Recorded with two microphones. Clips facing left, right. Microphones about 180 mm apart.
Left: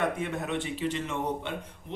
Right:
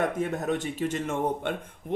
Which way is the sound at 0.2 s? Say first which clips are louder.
Right 4 dB; 40° right (ahead or behind).